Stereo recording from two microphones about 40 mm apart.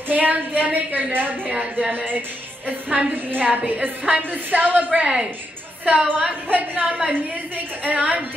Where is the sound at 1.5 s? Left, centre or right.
Right.